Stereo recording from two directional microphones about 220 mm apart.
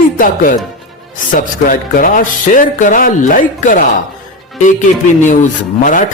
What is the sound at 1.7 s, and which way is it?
Speech, 40° left (ahead or behind).